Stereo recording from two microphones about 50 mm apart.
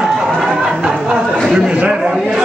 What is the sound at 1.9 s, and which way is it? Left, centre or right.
Chatter, centre.